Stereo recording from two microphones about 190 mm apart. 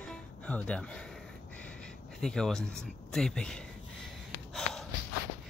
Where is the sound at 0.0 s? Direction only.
5° left (ahead or behind).